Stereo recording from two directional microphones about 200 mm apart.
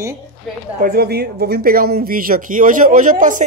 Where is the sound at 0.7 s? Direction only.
45° right (ahead or behind).